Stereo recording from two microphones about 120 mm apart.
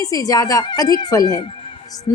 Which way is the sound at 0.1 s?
30° left (ahead or behind).